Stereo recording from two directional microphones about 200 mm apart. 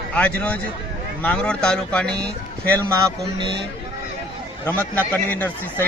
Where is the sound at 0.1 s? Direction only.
5° left (ahead or behind).